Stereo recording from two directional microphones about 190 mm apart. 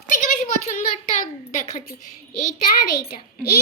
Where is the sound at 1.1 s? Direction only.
40° left (ahead or behind).